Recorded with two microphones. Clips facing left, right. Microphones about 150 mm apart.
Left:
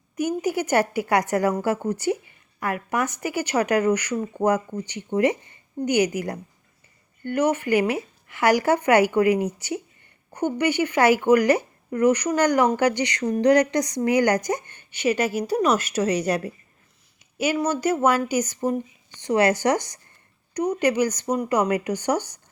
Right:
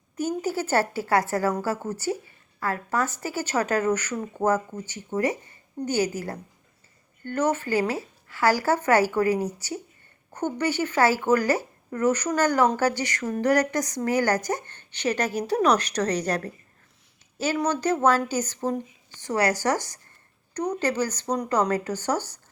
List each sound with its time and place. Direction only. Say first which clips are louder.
0.2 s speech: left 3 dB; 15° left (ahead or behind)